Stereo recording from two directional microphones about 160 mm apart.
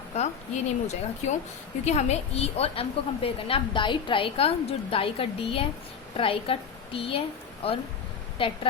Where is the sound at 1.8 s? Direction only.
45° left (ahead or behind).